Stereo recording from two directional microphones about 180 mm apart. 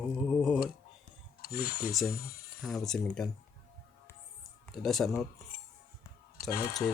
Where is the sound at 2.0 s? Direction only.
50° left (ahead or behind).